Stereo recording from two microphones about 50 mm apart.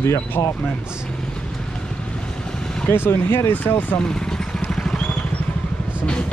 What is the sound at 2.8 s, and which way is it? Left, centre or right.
Speech, left.